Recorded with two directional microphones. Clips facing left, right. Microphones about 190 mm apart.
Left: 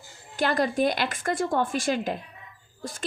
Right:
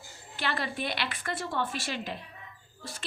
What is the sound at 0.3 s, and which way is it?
A woman's voice, 45° left (ahead or behind).